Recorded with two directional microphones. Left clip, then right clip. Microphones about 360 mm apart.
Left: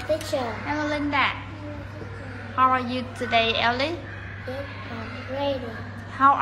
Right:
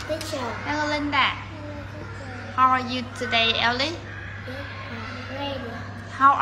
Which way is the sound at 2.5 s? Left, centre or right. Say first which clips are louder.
Right 1 dB; centre.